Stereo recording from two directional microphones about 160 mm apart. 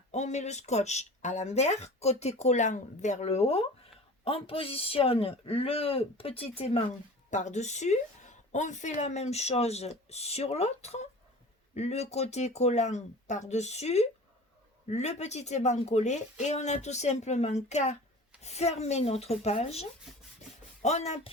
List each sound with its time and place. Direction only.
0.1 s speech: 45° left (ahead or behind)
7.3 s speech: 50° left (ahead or behind)